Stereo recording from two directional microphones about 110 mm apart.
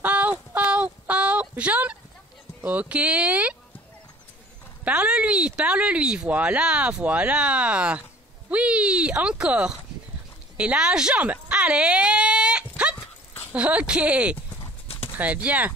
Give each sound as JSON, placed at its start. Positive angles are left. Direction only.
{"t": 0.0, "sound": "a sound", "side_deg": -15}
{"t": 2.6, "sound": "speech", "side_deg": -15}
{"t": 4.8, "sound": "speech", "side_deg": -10}
{"t": 10.6, "sound": "a sound", "side_deg": -10}
{"t": 12.9, "sound": "dog", "side_deg": 20}
{"t": 13.5, "sound": "speech", "side_deg": -10}